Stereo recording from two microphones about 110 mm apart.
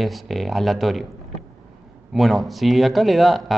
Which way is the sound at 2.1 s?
Centre (ahead or behind).